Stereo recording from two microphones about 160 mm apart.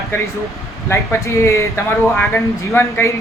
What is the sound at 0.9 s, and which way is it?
Speech, 15° left (ahead or behind).